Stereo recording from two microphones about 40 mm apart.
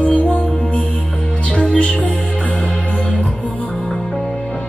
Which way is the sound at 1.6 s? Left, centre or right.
Left.